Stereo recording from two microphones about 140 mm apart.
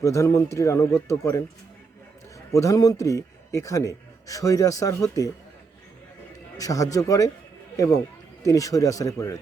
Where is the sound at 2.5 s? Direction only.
25° left (ahead or behind).